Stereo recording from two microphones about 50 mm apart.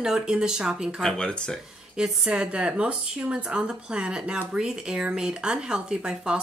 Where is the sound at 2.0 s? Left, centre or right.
Centre.